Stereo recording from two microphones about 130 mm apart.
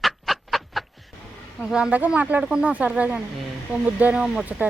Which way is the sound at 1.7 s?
10° right (ahead or behind).